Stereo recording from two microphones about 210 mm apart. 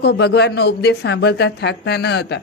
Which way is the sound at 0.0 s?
50° left (ahead or behind).